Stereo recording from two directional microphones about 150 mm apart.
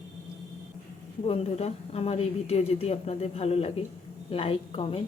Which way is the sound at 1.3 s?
45° left (ahead or behind).